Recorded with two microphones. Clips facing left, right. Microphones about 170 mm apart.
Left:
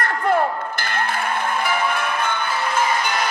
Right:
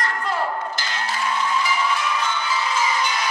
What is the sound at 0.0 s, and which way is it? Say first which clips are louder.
Music: left 5 dB; 55° left (ahead or behind).